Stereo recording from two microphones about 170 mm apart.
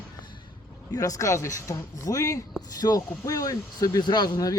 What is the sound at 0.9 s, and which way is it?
Speech, 20° left (ahead or behind).